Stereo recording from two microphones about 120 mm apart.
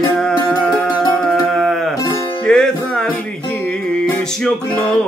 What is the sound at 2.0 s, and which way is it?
Music, 30° left (ahead or behind).